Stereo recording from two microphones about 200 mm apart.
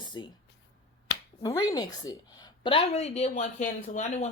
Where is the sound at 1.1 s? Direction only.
60° left (ahead or behind).